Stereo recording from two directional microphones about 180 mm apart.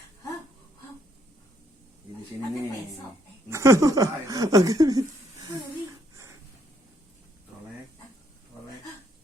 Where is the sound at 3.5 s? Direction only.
15° right (ahead or behind).